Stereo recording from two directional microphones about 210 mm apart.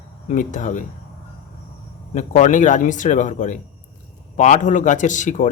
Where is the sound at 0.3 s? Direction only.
35° left (ahead or behind).